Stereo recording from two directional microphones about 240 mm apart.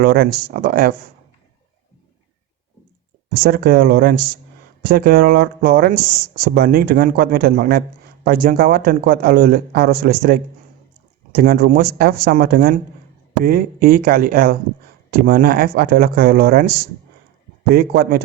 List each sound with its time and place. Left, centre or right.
0.0 s speech: right
3.4 s speech: right
17.7 s speech: right